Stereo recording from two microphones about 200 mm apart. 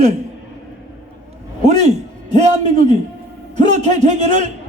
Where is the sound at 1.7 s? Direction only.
35° right (ahead or behind).